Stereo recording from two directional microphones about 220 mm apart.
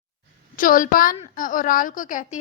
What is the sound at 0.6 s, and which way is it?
A woman's voice, 40° left (ahead or behind).